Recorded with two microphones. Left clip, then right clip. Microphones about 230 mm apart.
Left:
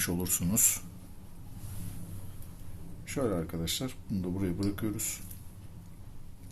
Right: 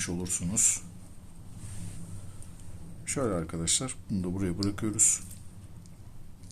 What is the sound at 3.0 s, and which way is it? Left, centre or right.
Speech, centre.